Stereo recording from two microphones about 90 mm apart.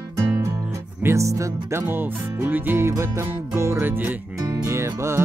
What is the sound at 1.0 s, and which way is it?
Music, 35° right (ahead or behind).